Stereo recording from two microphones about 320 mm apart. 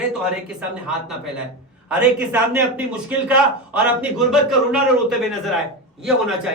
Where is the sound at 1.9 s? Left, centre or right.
Centre.